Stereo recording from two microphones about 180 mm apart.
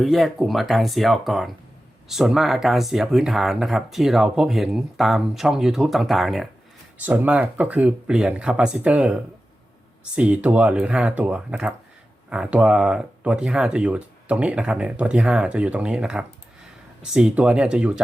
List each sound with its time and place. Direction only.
0.0 s speech: centre (ahead or behind)